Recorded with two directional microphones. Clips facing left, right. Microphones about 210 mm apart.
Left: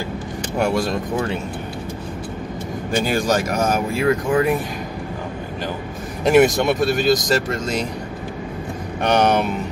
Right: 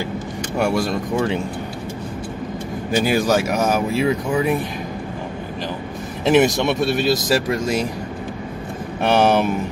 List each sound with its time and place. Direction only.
2.9 s speech: 5° right (ahead or behind)
6.2 s speech: centre (ahead or behind)
9.0 s speech: 5° right (ahead or behind)